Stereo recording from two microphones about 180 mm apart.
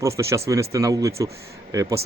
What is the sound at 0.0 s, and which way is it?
Speech, 15° right (ahead or behind).